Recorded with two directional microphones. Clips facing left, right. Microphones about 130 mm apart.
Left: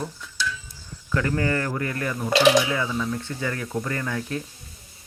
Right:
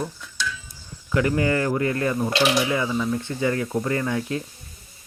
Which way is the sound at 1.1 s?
15° right (ahead or behind).